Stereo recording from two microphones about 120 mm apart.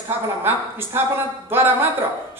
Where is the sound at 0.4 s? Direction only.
20° right (ahead or behind).